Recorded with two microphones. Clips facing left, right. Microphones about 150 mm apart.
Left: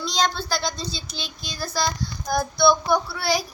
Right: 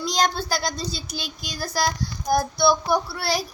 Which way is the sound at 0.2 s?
40° right (ahead or behind).